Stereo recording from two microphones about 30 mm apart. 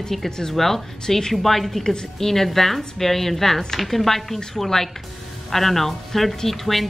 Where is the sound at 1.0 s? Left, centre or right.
Centre.